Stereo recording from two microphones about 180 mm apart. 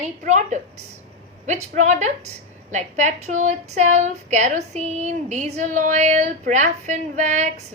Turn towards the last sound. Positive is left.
turn(degrees=-40)  # may be behind; listen again after turning